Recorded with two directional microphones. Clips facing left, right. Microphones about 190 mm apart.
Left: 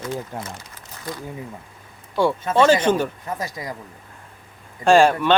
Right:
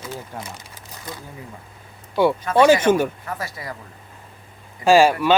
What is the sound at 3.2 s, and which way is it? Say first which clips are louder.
Speech: left 2 dB; 20° left (ahead or behind).